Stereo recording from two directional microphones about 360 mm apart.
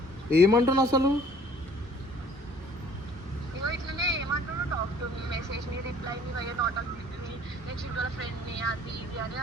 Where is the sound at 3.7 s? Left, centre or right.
Right.